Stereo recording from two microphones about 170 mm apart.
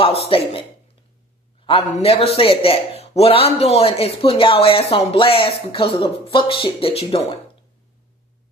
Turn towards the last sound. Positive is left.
turn(degrees=35)  # may be behind; listen again after turning